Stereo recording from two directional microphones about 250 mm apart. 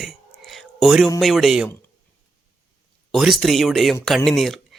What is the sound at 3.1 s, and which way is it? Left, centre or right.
Speech, centre.